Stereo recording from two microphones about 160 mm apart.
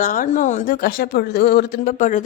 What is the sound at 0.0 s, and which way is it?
A woman's voice, 55° left (ahead or behind).